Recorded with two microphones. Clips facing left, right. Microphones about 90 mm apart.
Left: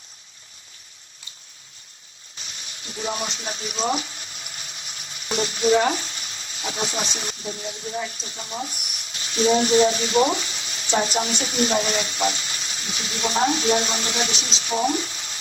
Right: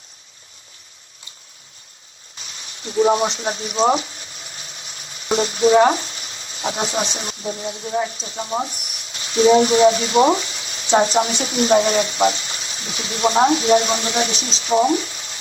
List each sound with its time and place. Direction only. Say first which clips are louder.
2.5 s speech: right 8 dB; 35° right (ahead or behind)